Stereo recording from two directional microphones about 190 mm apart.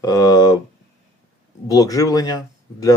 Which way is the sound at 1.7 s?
15° left (ahead or behind).